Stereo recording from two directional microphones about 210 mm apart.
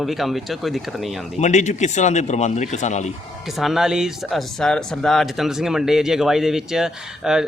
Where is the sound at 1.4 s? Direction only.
35° left (ahead or behind).